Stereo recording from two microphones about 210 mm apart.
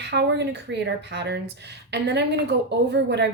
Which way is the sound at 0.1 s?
55° right (ahead or behind).